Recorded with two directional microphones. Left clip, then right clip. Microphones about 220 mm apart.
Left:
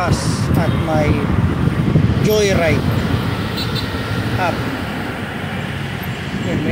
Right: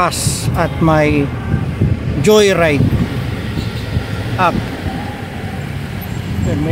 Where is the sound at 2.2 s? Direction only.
45° right (ahead or behind).